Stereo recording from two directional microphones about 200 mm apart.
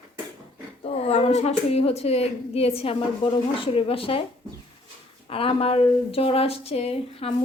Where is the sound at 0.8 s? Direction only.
30° left (ahead or behind).